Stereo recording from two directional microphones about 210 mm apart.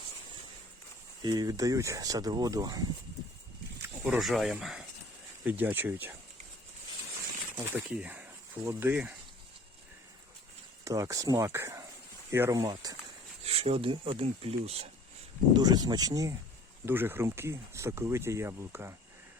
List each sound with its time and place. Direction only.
1.2 s speech: 20° right (ahead or behind)
3.8 s speech: 10° right (ahead or behind)
7.5 s speech: 10° right (ahead or behind)
10.8 s speech: 15° right (ahead or behind)
15.5 s speech: 20° right (ahead or behind)